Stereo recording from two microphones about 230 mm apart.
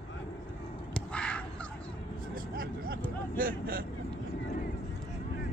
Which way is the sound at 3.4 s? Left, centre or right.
Right.